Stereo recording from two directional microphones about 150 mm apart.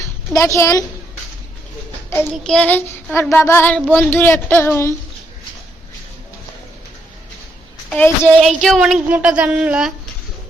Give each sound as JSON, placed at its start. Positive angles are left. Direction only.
{"t": 0.3, "sound": "a woman's voice", "side_deg": 20}
{"t": 2.3, "sound": "child singing", "side_deg": 5}
{"t": 7.9, "sound": "child singing", "side_deg": 15}
{"t": 8.4, "sound": "speech", "side_deg": 0}
{"t": 9.0, "sound": "a sound", "side_deg": -10}